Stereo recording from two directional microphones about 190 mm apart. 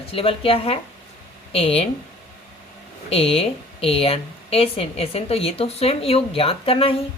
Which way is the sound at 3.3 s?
30° left (ahead or behind).